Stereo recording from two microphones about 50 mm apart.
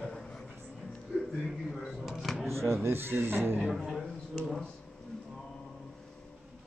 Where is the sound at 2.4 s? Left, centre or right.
Right.